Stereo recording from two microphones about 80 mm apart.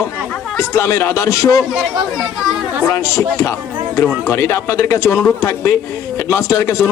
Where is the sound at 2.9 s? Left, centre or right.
Left.